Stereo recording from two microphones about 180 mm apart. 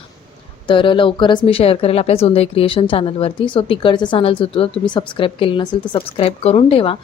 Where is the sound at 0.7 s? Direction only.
25° left (ahead or behind).